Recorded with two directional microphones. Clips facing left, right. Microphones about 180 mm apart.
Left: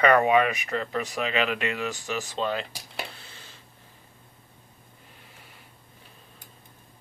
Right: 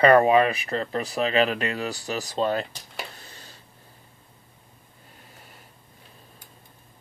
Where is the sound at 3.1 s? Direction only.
40° right (ahead or behind).